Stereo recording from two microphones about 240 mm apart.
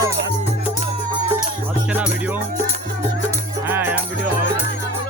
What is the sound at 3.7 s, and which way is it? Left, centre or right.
Music, centre.